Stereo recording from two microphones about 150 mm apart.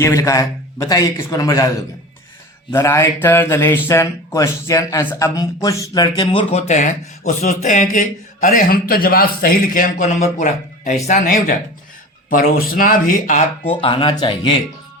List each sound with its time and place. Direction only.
0.0 s speech: 20° left (ahead or behind)
2.7 s speech: 20° left (ahead or behind)
6.5 s speech: 50° left (ahead or behind)
12.3 s speech: 70° left (ahead or behind)
13.7 s speech: 35° left (ahead or behind)